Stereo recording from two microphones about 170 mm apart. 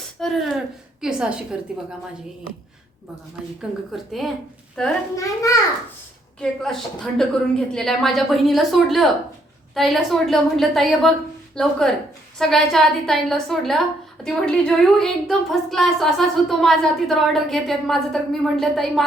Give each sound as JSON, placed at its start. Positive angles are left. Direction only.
{"t": 0.2, "sound": "a woman's voice", "side_deg": 0}
{"t": 3.9, "sound": "a woman's voice", "side_deg": 0}
{"t": 5.1, "sound": "a child's voice", "side_deg": 20}
{"t": 6.4, "sound": "a woman's voice", "side_deg": 5}